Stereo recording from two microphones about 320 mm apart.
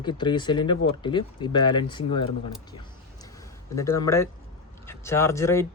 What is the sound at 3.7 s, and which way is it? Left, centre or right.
Speech, centre.